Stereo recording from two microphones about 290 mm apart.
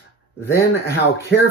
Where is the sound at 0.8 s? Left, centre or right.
Left.